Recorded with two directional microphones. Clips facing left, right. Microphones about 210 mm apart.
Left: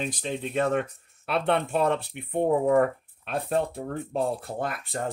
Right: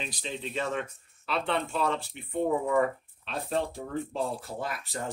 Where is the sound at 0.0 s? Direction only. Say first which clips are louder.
Left 6 dB; 50° left (ahead or behind).